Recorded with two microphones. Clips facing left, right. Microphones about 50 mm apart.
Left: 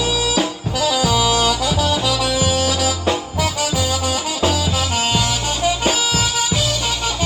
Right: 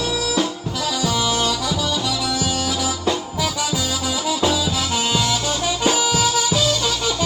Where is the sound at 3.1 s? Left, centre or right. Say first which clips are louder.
Left 2 dB; left.